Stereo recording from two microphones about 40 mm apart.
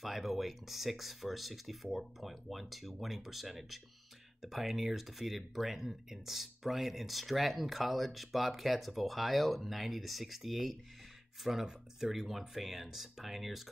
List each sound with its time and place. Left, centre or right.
0.0 s speech: centre